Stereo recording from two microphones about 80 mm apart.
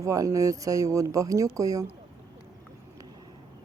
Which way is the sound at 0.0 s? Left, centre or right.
Right.